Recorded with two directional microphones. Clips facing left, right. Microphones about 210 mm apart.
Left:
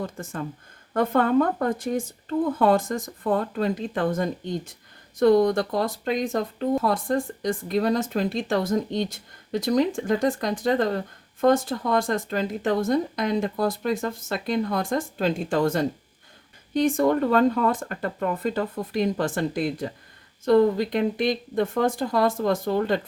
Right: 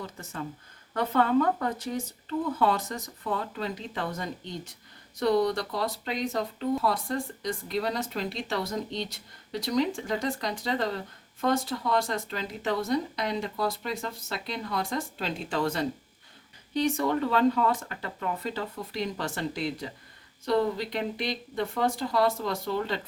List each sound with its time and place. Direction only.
0.0 s speech: 50° left (ahead or behind)